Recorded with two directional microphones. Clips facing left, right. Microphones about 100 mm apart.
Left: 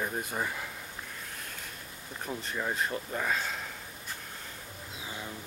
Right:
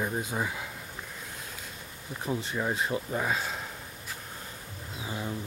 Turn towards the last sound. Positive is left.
turn(degrees=-15)  # may be behind; listen again after turning